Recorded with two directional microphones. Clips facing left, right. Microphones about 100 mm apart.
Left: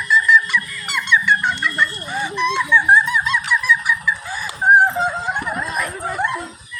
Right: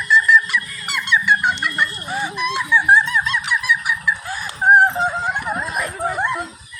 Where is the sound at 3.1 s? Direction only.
5° left (ahead or behind).